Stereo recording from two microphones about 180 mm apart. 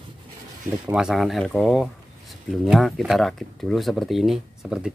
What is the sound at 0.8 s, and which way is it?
Speech, 5° right (ahead or behind).